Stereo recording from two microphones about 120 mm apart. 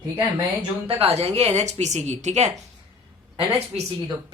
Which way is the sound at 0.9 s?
55° right (ahead or behind).